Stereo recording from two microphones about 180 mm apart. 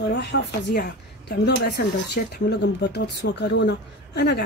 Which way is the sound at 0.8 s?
60° left (ahead or behind).